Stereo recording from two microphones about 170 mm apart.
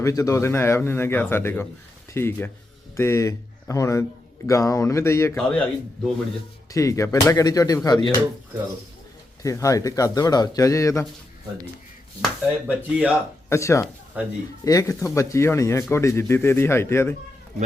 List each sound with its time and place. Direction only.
0.0 s speech: 20° left (ahead or behind)
5.4 s a man's voice: 5° left (ahead or behind)
6.7 s speech: 20° left (ahead or behind)
9.4 s speech: 20° left (ahead or behind)
12.6 s speech: 10° right (ahead or behind)
13.5 s speech: 15° left (ahead or behind)